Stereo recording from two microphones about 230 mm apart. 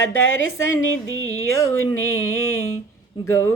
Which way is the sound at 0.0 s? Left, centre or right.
Left.